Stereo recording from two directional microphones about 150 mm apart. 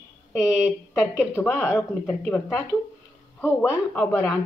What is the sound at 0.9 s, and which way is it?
Speech, 15° left (ahead or behind).